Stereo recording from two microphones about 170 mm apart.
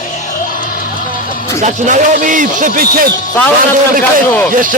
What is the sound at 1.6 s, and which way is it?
Speech, 50° right (ahead or behind).